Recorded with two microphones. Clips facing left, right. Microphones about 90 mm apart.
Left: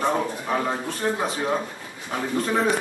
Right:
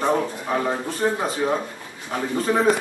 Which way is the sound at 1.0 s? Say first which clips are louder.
Right 3 dB; 10° right (ahead or behind).